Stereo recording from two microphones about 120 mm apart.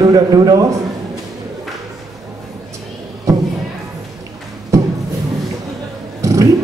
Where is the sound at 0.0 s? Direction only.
30° right (ahead or behind).